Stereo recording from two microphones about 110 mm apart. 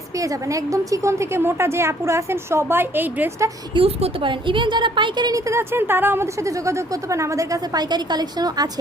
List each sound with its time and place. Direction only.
0.2 s a woman's voice: 30° right (ahead or behind)
3.8 s a woman's voice: 55° right (ahead or behind); by 5.4 s 40° right (ahead or behind)
5.5 s a woman's voice: 20° right (ahead or behind); by 8.7 s 35° right (ahead or behind)